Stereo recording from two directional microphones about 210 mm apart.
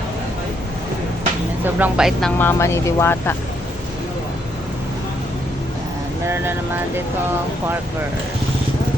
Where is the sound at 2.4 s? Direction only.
10° left (ahead or behind).